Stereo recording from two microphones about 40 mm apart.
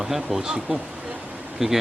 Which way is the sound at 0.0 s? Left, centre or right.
Centre.